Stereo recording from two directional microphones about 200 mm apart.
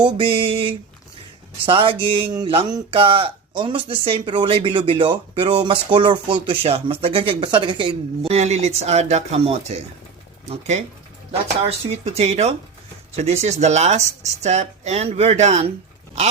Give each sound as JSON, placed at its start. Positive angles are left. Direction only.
{"t": 0.0, "sound": "speech", "side_deg": -25}
{"t": 11.9, "sound": "speech", "side_deg": -30}